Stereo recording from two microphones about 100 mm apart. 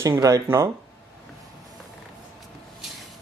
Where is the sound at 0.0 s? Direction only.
30° right (ahead or behind).